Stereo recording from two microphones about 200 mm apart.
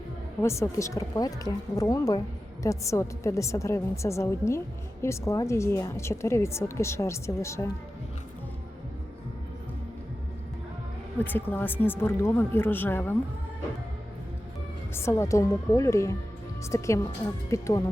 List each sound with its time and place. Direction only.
0.4 s a woman's voice: 15° left (ahead or behind)
11.2 s a woman's voice: 10° left (ahead or behind)
14.9 s a woman's voice: 15° left (ahead or behind)